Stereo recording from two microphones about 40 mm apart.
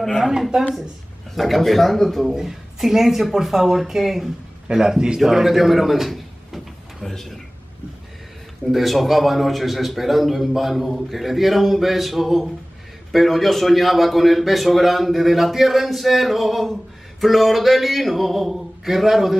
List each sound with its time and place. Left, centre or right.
1.3 s a man's voice: centre
2.3 s a man's voice: centre
5.2 s a sound: centre
8.7 s a man's voice: centre